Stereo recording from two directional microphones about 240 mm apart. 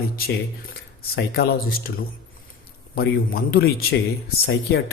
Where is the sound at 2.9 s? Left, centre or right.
Left.